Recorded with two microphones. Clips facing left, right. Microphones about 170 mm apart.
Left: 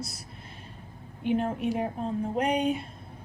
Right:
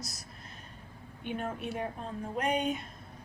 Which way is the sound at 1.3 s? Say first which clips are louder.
Left 8 dB; 30° left (ahead or behind).